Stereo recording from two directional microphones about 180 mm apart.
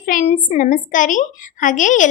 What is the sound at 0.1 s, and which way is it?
A woman's voice, 45° left (ahead or behind).